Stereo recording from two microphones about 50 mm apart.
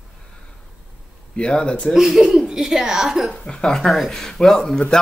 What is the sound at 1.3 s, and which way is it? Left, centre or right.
Speech, centre.